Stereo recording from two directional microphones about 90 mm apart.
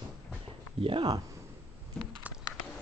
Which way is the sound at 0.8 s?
75° right (ahead or behind).